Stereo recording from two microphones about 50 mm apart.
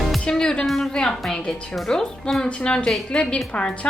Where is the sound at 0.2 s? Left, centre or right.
Centre.